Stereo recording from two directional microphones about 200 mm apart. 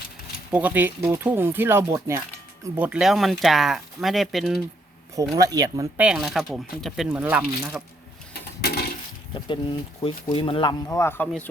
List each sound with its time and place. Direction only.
0.5 s speech: 10° right (ahead or behind)
5.3 s speech: 20° right (ahead or behind)
6.0 s speech: 5° right (ahead or behind)
8.3 s a sound: 50° left (ahead or behind)
10.0 s speech: 25° left (ahead or behind)